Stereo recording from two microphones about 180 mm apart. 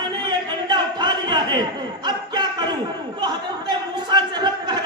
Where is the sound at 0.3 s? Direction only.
25° right (ahead or behind).